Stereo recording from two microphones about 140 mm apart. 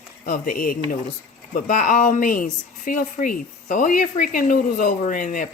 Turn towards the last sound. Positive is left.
turn(degrees=75)  # may be behind; listen again after turning